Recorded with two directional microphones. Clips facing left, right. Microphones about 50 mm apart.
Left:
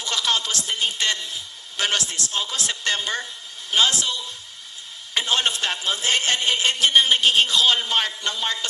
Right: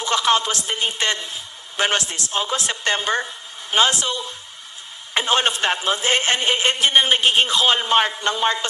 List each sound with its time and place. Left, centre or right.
0.0 s a woman's voice: right